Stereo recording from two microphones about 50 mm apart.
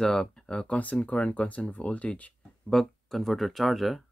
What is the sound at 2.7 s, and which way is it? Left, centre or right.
Speech, centre.